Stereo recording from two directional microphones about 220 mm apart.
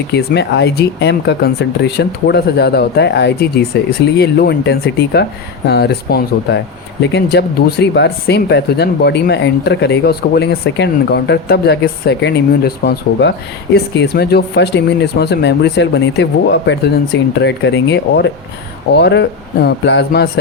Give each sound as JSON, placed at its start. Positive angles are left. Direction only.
{"t": 0.1, "sound": "speech", "side_deg": 50}